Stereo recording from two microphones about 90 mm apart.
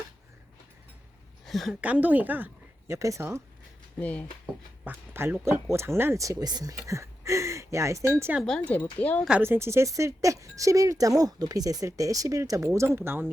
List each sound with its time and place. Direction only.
1.5 s a woman's voice: centre (ahead or behind)
1.7 s speech: 15° right (ahead or behind)
2.8 s speech: 35° right (ahead or behind)
4.0 s speech: 15° left (ahead or behind)
4.9 s speech: 20° right (ahead or behind)
6.2 s speech: 45° right (ahead or behind); by 8.3 s 30° right (ahead or behind)
8.4 s speech: 10° left (ahead or behind)
9.4 s speech: 25° right (ahead or behind)